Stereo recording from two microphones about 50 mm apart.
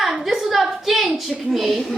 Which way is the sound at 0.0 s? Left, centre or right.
Centre.